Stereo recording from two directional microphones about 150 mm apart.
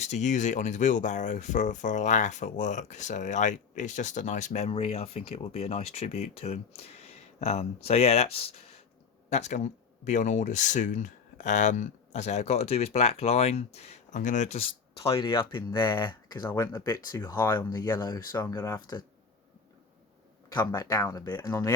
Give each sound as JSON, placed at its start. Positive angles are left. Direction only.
{"t": 0.0, "sound": "speech", "side_deg": 50}
{"t": 9.3, "sound": "speech", "side_deg": 50}
{"t": 17.4, "sound": "speech", "side_deg": 15}
{"t": 20.5, "sound": "speech", "side_deg": 30}